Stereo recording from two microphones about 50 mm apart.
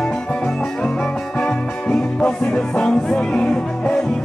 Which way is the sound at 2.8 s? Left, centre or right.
Left.